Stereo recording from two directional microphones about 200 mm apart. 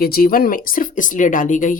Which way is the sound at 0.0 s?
45° left (ahead or behind).